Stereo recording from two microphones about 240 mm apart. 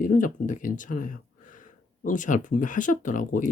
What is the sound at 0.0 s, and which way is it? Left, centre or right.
Speech, left.